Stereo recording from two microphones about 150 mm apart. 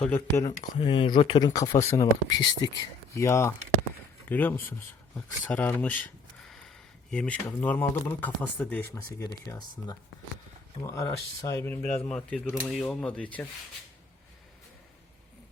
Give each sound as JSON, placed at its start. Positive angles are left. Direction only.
{"t": 0.1, "sound": "speech", "side_deg": 20}
{"t": 0.8, "sound": "speech", "side_deg": 35}
{"t": 7.1, "sound": "speech", "side_deg": 10}
{"t": 9.1, "sound": "speech", "side_deg": 25}